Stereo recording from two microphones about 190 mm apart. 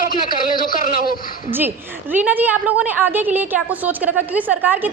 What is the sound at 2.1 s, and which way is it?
A woman's voice, 10° right (ahead or behind).